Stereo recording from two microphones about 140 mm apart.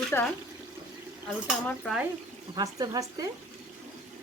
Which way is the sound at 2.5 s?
25° right (ahead or behind).